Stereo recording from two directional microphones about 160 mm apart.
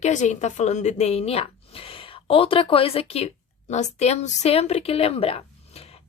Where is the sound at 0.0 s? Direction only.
50° left (ahead or behind).